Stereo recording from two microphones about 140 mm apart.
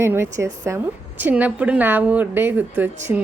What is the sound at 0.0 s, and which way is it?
A woman's voice, 20° right (ahead or behind).